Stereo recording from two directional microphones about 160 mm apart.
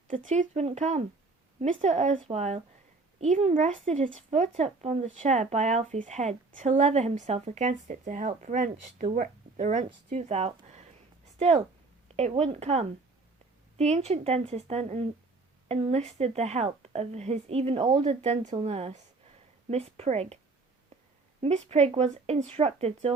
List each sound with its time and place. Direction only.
0.1 s speech: 50° right (ahead or behind)
21.4 s speech: 40° right (ahead or behind)